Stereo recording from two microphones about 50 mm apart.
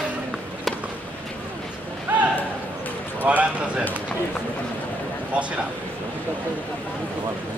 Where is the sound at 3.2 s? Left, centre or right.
Right.